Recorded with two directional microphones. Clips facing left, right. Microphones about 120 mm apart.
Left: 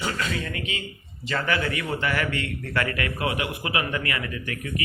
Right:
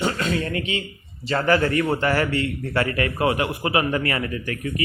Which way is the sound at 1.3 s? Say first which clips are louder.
Right 6 dB; 35° right (ahead or behind).